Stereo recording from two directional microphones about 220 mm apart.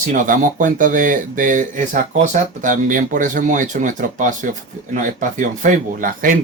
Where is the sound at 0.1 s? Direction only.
35° right (ahead or behind).